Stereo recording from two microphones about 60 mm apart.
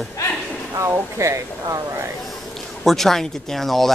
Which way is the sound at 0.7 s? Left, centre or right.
Right.